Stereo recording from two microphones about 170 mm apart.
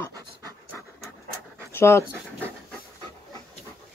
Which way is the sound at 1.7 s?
15° left (ahead or behind).